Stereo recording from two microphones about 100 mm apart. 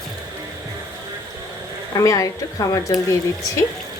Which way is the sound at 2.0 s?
35° left (ahead or behind).